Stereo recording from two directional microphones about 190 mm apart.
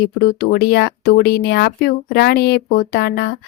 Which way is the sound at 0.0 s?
55° left (ahead or behind).